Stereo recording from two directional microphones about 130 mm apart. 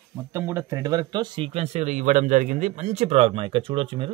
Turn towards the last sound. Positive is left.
turn(degrees=-45)  # may be behind; listen again after turning